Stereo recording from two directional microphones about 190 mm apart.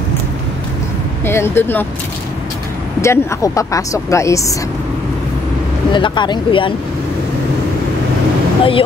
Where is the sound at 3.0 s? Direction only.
15° left (ahead or behind).